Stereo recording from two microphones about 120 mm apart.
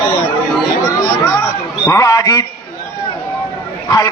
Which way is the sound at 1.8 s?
25° left (ahead or behind).